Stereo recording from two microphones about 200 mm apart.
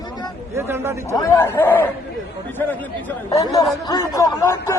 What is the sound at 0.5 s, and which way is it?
Speech, 10° right (ahead or behind).